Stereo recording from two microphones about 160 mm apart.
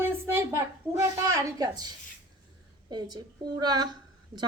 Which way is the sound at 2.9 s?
25° right (ahead or behind).